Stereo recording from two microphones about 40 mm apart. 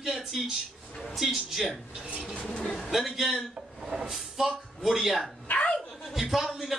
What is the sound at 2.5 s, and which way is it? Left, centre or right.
Speech, left.